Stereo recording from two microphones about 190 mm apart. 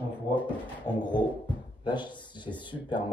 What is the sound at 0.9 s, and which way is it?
Speech, 20° left (ahead or behind).